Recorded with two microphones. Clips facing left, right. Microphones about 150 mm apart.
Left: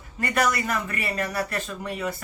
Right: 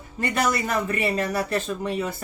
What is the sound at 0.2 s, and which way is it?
Speech, 25° right (ahead or behind).